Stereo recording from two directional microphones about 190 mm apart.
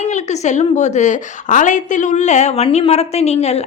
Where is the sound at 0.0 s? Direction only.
40° left (ahead or behind).